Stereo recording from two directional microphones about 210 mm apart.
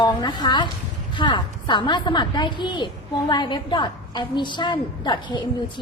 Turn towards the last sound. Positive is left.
turn(degrees=20)  # may be behind; listen again after turning